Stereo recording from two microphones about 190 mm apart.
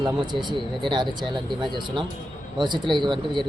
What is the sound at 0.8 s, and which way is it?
Speech, 25° right (ahead or behind).